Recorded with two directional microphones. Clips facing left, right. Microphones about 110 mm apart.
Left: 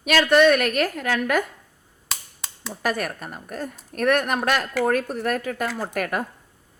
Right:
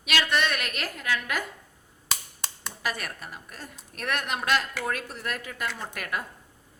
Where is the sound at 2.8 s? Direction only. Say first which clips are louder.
Left 8 dB; 45° left (ahead or behind).